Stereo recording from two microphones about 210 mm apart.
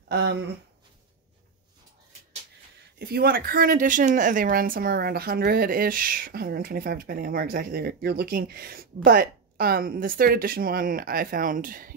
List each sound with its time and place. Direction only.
0.1 s speech: 50° right (ahead or behind)
3.0 s a woman's voice: 45° right (ahead or behind)